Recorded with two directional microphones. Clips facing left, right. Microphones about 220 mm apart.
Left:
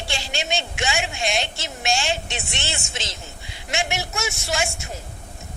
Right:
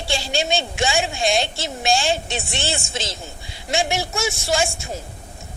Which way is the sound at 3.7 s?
30° right (ahead or behind).